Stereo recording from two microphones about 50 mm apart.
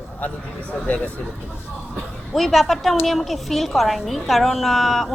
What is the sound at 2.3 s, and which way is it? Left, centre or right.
A woman's voice, centre.